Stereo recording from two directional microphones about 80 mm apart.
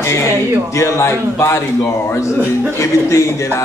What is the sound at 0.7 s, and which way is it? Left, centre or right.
Speech, left.